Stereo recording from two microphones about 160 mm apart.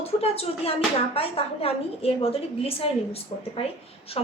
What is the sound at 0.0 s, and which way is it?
A woman's voice, 40° left (ahead or behind).